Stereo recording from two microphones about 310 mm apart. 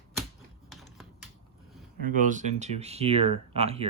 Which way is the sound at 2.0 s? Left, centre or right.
Right.